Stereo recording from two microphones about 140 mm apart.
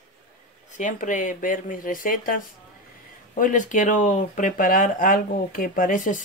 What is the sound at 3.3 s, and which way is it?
Speech, 70° left (ahead or behind).